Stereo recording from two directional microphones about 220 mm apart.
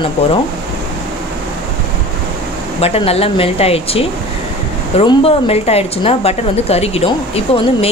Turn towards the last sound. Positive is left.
turn(degrees=25)  # may be behind; listen again after turning